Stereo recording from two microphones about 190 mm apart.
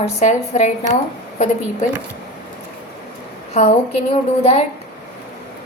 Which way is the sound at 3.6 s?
35° left (ahead or behind).